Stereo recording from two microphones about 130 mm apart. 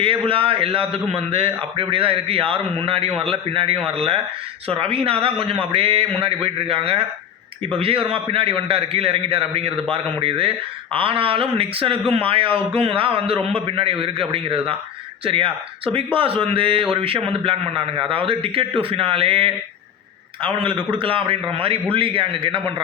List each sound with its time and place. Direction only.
0.0 s a man's voice: 45° right (ahead or behind)